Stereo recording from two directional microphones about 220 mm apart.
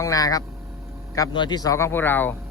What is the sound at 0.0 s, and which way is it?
A man's voice, 15° left (ahead or behind).